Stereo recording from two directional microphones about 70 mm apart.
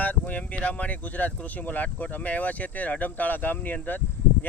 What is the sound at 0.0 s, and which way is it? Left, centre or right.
Speech, left.